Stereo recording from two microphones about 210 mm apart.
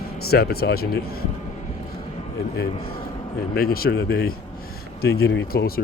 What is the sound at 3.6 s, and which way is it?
A man's voice, 45° left (ahead or behind).